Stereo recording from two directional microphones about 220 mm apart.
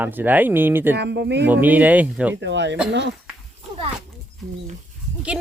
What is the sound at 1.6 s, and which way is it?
Speech, 5° right (ahead or behind).